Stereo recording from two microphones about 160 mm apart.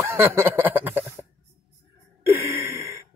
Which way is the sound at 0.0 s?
15° right (ahead or behind).